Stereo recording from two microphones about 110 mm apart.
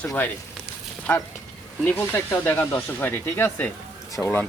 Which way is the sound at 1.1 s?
15° left (ahead or behind).